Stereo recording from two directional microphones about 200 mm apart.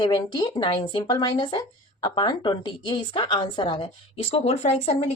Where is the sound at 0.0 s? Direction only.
20° left (ahead or behind).